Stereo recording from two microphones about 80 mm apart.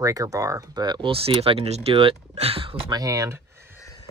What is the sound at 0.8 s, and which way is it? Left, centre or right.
Speech, right.